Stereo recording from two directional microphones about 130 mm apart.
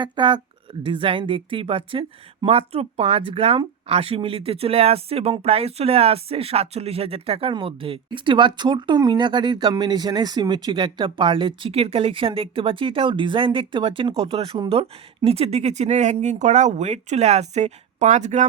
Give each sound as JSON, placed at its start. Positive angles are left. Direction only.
{"t": 0.0, "sound": "speech", "side_deg": -35}